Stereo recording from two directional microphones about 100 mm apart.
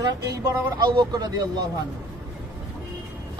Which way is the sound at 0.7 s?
50° right (ahead or behind).